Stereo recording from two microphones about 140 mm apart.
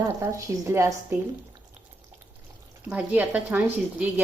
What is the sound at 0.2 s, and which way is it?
Stir, 20° right (ahead or behind).